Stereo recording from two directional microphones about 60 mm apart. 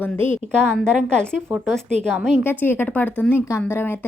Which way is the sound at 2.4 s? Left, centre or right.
Left.